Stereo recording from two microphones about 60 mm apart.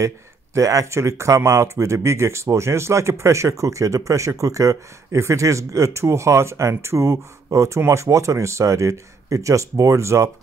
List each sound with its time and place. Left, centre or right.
0.6 s speech: right
0.9 s speech: right